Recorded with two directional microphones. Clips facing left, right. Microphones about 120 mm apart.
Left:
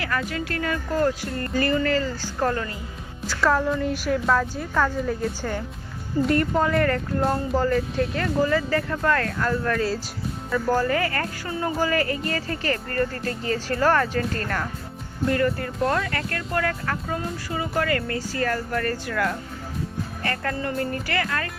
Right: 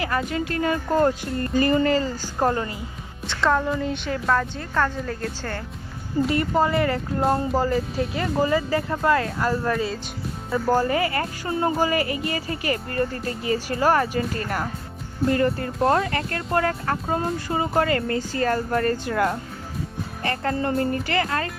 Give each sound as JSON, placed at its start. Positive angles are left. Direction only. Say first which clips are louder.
{"t": 0.0, "sound": "speech", "louder": "right 3 dB", "side_deg": -25}
{"t": 3.2, "sound": "a woman's voice", "louder": "even", "side_deg": 0}
{"t": 6.2, "sound": "speech", "louder": "even", "side_deg": -5}
{"t": 15.3, "sound": "speech", "louder": "right 1 dB", "side_deg": -25}